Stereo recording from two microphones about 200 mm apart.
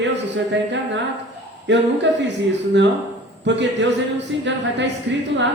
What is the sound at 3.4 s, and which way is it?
Speech, 60° right (ahead or behind).